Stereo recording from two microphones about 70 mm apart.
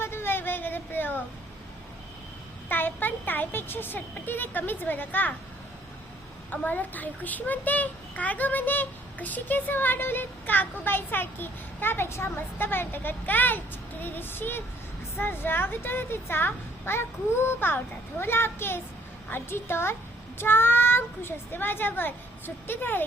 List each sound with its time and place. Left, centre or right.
0.0 s a sound: left
2.6 s speech: left
6.5 s a child's voice: left